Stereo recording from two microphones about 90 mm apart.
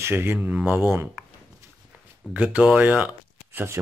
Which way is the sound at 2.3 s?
15° right (ahead or behind).